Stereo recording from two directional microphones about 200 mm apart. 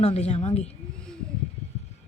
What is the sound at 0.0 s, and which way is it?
Speech, 30° left (ahead or behind).